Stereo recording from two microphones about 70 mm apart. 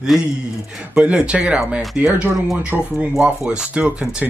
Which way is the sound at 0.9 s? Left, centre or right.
Centre.